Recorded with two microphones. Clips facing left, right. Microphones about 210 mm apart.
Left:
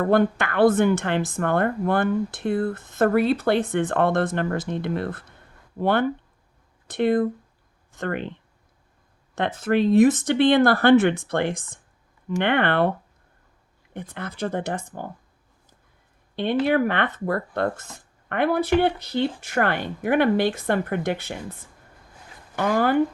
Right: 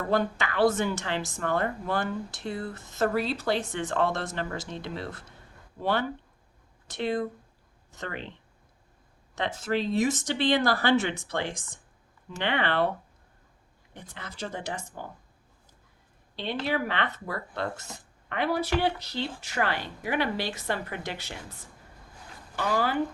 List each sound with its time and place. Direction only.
0.0 s a woman's voice: 55° left (ahead or behind)
9.3 s a woman's voice: 55° left (ahead or behind)
13.9 s a woman's voice: 55° left (ahead or behind)
16.3 s speech: 55° left (ahead or behind)
22.5 s a woman's voice: 55° left (ahead or behind)